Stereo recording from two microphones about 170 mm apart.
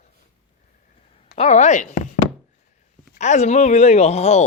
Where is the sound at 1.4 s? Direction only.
45° left (ahead or behind).